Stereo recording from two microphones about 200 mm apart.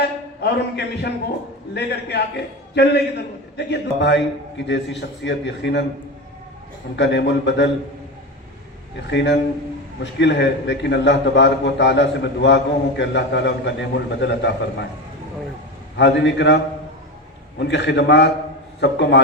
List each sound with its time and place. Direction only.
0.4 s a man's voice: 55° left (ahead or behind)
6.9 s a man's voice: 60° left (ahead or behind)
9.0 s a man's voice: 60° left (ahead or behind)
16.0 s a man's voice: 65° left (ahead or behind)
17.6 s a man's voice: 60° left (ahead or behind)